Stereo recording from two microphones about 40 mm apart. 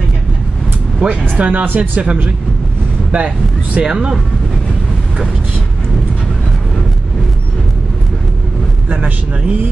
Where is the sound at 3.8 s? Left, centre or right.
Right.